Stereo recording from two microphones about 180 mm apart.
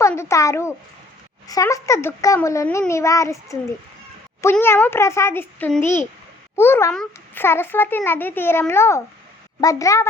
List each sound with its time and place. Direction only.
0.0 s a child's voice: 15° left (ahead or behind)